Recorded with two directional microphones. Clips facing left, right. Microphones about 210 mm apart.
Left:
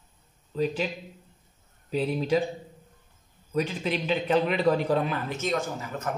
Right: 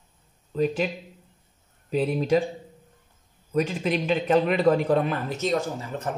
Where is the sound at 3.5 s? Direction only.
50° right (ahead or behind).